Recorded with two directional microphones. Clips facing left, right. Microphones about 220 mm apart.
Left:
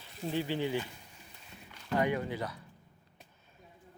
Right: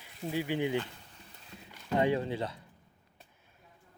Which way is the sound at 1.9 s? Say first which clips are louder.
Right 2 dB; 25° right (ahead or behind).